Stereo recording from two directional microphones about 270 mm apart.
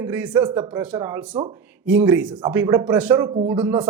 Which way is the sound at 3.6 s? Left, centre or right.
Centre.